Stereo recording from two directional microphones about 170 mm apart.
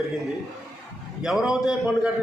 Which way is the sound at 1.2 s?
5° right (ahead or behind).